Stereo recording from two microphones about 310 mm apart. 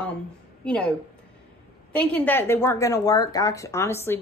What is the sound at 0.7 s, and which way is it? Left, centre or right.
A woman's voice, centre.